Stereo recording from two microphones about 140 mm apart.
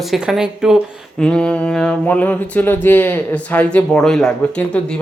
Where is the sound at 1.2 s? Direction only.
5° left (ahead or behind).